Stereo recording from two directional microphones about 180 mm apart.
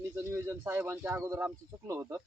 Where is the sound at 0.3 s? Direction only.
15° right (ahead or behind).